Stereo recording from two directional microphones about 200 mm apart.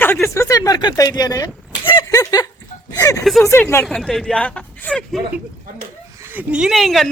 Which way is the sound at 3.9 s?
Centre (ahead or behind).